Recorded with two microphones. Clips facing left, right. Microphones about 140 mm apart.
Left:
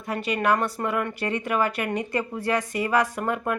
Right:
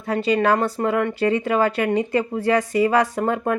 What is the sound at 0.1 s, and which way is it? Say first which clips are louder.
A woman's voice: right 5 dB; 30° right (ahead or behind).